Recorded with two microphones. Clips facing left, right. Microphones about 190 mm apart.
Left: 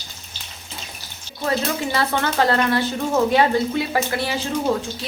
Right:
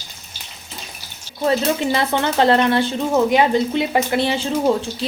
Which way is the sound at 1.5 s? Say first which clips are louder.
Right 5 dB; 20° right (ahead or behind).